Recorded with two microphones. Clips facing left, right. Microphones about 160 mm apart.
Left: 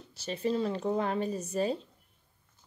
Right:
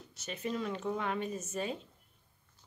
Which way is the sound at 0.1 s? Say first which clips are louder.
Left 7 dB; 30° left (ahead or behind).